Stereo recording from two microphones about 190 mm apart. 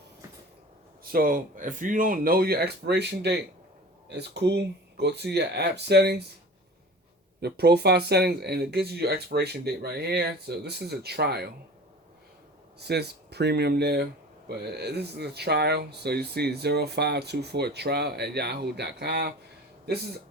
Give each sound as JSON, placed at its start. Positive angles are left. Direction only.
{"t": 1.0, "sound": "speech", "side_deg": -50}
{"t": 7.4, "sound": "speech", "side_deg": -60}
{"t": 12.8, "sound": "speech", "side_deg": -60}